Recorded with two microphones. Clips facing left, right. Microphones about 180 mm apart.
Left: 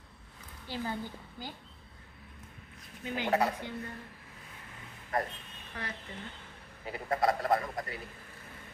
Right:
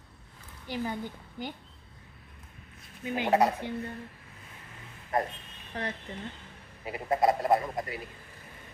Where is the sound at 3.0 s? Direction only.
20° right (ahead or behind).